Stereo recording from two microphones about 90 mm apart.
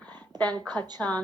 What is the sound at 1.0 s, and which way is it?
Speech, 15° left (ahead or behind).